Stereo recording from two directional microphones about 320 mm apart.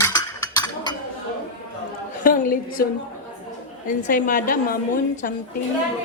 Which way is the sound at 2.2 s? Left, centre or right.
Left.